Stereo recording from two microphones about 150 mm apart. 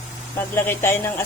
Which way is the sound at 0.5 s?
15° left (ahead or behind).